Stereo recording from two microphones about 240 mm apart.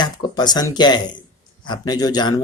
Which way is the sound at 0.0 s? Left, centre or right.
Centre.